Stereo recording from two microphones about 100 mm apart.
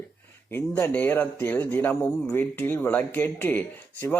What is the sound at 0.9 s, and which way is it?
Speech, 20° left (ahead or behind).